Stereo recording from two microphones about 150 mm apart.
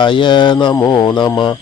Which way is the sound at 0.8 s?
30° left (ahead or behind).